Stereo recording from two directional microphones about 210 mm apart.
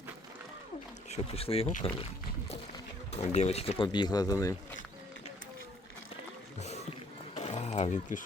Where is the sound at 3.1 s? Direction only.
30° left (ahead or behind).